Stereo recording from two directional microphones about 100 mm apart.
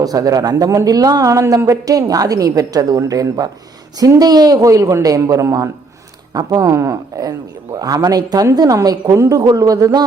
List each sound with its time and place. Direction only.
0.0 s speech: 35° right (ahead or behind)